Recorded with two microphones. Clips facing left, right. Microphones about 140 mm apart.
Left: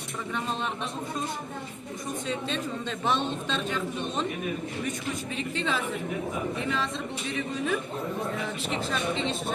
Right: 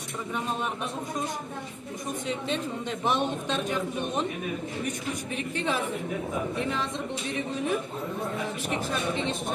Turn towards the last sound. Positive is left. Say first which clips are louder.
# right 1 dB
turn(degrees=-15)  # may be behind; listen again after turning